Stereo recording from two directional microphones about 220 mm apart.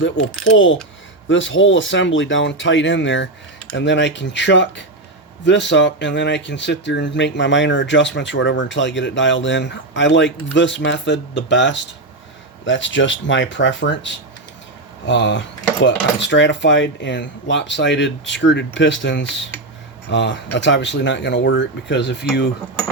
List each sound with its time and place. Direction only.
0.5 s speech: 60° left (ahead or behind)